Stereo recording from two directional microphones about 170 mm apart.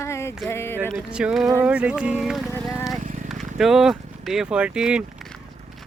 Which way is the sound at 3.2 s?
Centre (ahead or behind).